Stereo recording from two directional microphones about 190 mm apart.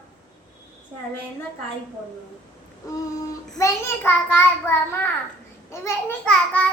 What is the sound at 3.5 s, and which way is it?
Babbling, 15° left (ahead or behind).